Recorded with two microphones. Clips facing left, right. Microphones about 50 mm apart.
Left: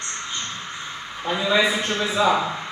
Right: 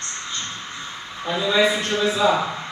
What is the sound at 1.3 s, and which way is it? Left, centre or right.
Speech, centre.